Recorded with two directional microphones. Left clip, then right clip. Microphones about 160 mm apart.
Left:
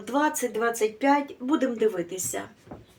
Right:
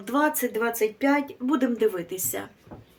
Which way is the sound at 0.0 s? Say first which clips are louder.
Right 1 dB; 30° right (ahead or behind).